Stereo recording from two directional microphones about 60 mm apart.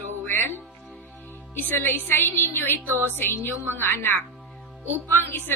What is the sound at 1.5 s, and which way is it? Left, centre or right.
A woman's voice, left.